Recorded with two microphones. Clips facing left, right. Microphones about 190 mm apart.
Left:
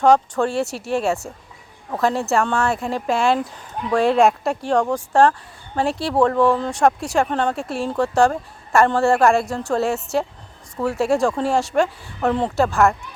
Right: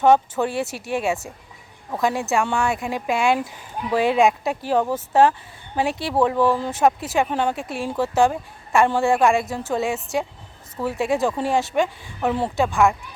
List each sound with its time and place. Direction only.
0.0 s speech: 5° right (ahead or behind)